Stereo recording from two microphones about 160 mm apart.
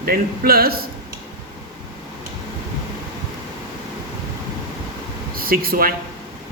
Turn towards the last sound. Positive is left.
turn(degrees=-65)  # may be behind; listen again after turning